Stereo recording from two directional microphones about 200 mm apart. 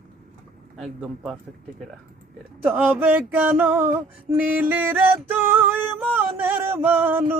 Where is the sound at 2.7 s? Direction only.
5° right (ahead or behind).